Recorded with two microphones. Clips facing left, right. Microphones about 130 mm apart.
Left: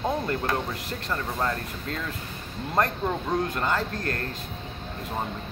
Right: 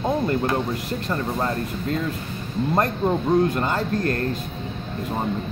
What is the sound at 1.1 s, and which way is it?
Speech, 20° right (ahead or behind).